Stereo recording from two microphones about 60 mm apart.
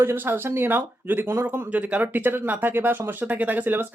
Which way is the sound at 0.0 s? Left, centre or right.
Right.